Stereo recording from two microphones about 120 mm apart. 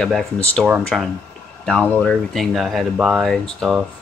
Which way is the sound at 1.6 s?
10° left (ahead or behind).